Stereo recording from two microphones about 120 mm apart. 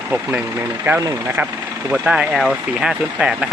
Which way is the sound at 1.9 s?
10° right (ahead or behind).